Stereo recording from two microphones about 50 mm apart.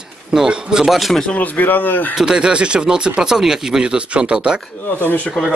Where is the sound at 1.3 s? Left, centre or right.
Left.